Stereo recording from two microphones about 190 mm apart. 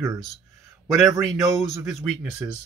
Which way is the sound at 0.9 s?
Centre (ahead or behind).